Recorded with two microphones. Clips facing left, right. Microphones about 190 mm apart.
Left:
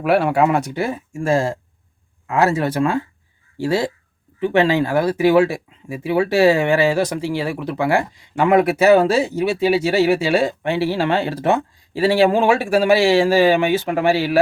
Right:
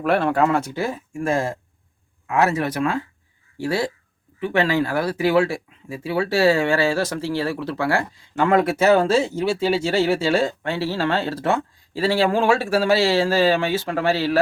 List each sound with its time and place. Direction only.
0.0 s speech: 10° left (ahead or behind)